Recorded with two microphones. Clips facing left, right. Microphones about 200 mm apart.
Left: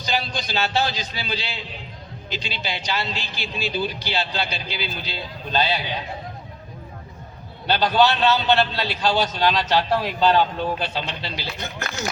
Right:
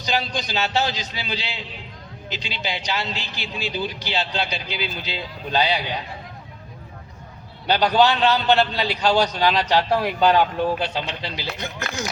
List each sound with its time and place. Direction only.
0.0 s a man's voice: 15° right (ahead or behind)
7.7 s a man's voice: 15° right (ahead or behind)